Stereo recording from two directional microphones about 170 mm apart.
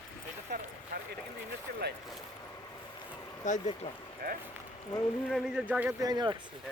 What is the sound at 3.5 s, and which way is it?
Speech, 35° left (ahead or behind).